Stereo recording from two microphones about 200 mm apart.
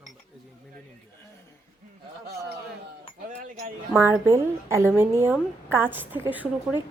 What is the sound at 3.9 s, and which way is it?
A woman's voice, 10° right (ahead or behind).